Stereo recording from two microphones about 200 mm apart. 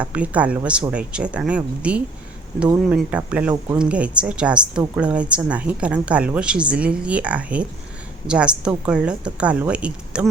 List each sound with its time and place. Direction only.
0.0 s a woman's voice: 5° right (ahead or behind)